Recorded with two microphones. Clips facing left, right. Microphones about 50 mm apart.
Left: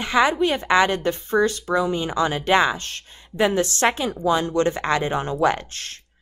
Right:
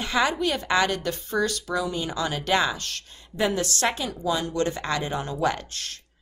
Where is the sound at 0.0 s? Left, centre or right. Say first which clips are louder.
Left 5 dB; left.